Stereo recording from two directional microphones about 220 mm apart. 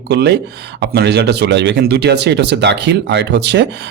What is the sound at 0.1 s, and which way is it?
Speech, 50° right (ahead or behind).